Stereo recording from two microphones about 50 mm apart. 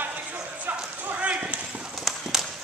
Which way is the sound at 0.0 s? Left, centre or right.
Right.